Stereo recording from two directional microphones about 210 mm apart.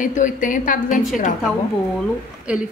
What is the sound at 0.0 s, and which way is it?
A woman's voice, 40° left (ahead or behind).